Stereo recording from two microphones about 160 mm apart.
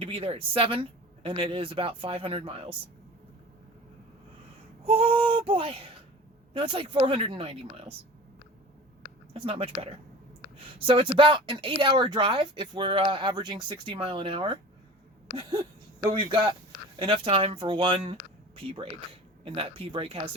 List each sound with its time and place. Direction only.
0.0 s speech: 35° right (ahead or behind)
4.9 s speech: 35° right (ahead or behind)
9.3 s speech: 35° right (ahead or behind)
15.4 s a sound: 25° right (ahead or behind)
16.1 s speech: 30° right (ahead or behind)